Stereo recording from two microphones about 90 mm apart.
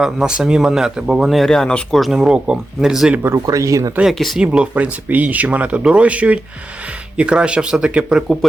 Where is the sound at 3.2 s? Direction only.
30° right (ahead or behind).